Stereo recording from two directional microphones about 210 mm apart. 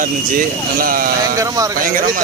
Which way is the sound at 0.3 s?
40° right (ahead or behind).